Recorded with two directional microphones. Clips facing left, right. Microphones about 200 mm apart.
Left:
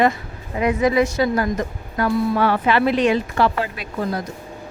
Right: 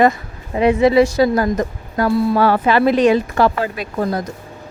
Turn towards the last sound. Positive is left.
turn(degrees=-40)  # may be behind; listen again after turning